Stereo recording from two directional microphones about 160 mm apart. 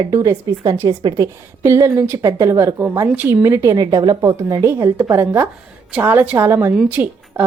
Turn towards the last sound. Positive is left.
turn(degrees=-10)  # may be behind; listen again after turning